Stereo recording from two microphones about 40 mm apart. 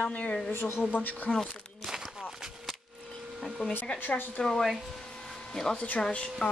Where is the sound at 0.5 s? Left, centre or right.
Left.